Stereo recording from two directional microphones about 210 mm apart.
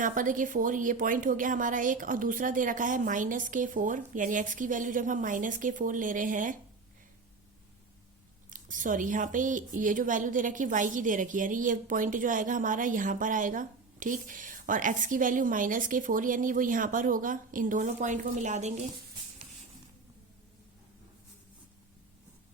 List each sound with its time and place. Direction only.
0.0 s a woman's voice: 40° right (ahead or behind)
8.4 s a woman's voice: 40° right (ahead or behind)